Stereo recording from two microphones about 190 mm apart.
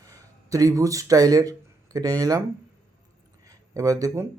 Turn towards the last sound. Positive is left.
turn(degrees=-20)  # may be behind; listen again after turning